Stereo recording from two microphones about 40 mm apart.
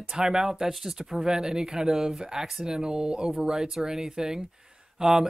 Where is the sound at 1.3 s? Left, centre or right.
Centre.